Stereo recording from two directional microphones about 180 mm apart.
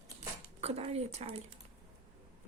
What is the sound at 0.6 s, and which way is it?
Speech, 35° right (ahead or behind).